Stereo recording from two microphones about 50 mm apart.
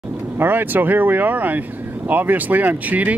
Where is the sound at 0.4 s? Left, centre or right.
Right.